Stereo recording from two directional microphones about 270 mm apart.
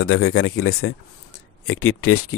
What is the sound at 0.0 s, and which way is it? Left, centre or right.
Speech, left.